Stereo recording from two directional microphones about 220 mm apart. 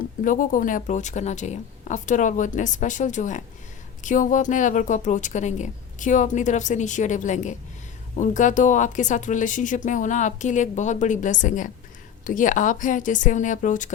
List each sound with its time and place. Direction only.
0.3 s speech: 35° left (ahead or behind)